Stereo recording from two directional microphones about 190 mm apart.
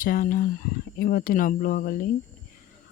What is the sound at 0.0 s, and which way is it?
Speech, 50° left (ahead or behind).